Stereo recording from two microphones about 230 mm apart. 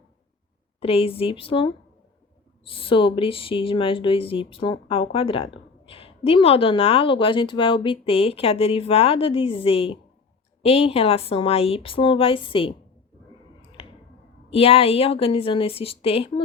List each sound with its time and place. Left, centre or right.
0.8 s a woman's voice: left
14.5 s a woman's voice: left